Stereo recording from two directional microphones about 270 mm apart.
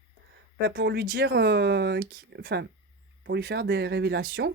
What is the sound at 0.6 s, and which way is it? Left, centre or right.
Speech, right.